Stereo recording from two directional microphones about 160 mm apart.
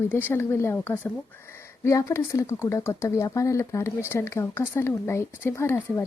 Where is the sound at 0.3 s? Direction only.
15° left (ahead or behind).